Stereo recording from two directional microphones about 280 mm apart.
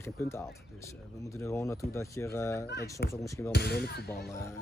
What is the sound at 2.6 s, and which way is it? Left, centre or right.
Speech, left.